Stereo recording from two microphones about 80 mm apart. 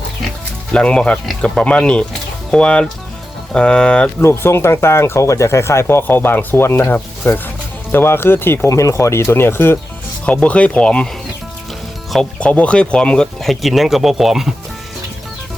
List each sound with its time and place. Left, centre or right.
0.7 s speech: centre
4.2 s speech: left
8.7 s speech: left
10.2 s speech: centre
12.4 s speech: centre